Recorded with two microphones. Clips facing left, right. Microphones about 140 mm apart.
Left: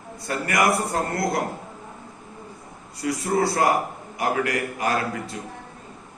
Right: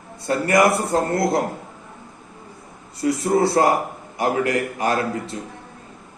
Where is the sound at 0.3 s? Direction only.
30° right (ahead or behind).